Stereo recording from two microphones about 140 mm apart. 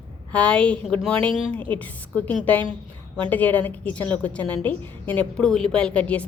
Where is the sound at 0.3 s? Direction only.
10° left (ahead or behind).